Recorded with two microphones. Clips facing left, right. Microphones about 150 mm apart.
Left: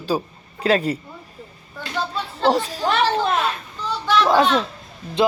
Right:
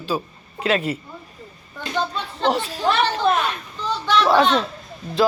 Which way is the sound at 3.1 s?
30° left (ahead or behind).